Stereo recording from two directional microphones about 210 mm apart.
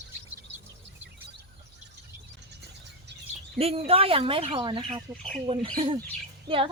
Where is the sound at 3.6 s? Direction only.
25° right (ahead or behind).